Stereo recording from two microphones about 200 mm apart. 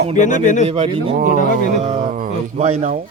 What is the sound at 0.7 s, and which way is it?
A man's voice, 30° right (ahead or behind).